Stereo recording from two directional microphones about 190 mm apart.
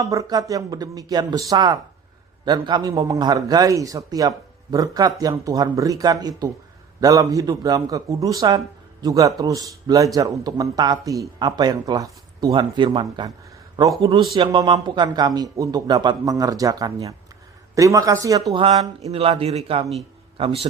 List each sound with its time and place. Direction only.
0.0 s a man's voice: 15° right (ahead or behind)
18.5 s speech: 30° right (ahead or behind)